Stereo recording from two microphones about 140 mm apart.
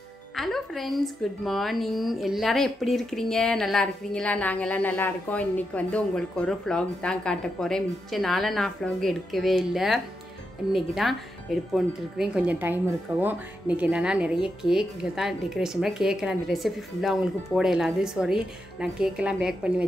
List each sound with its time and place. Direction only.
0.4 s speech: centre (ahead or behind)